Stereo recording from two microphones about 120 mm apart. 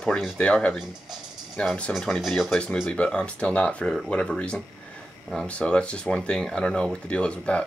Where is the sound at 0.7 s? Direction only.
5° right (ahead or behind).